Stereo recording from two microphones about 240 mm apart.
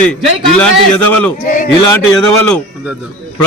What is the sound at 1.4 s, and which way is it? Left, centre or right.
Speech, left.